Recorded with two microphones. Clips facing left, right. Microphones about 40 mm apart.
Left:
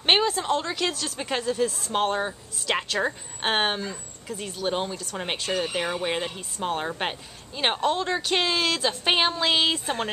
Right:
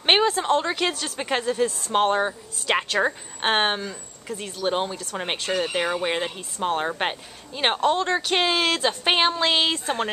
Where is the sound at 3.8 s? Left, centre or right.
Centre.